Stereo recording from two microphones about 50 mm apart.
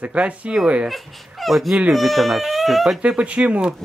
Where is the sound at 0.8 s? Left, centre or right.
Centre.